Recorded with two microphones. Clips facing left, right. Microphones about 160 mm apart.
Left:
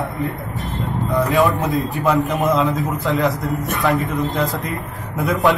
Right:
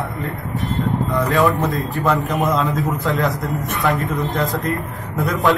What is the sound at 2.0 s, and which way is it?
A man's voice, centre (ahead or behind).